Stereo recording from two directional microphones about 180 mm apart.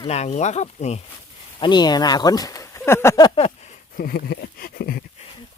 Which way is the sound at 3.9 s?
60° left (ahead or behind).